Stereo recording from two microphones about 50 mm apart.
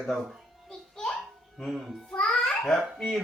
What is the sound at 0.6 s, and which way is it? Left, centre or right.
Music, centre.